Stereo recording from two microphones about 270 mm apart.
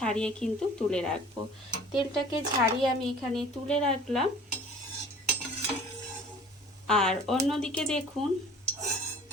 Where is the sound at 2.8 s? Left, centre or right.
Centre.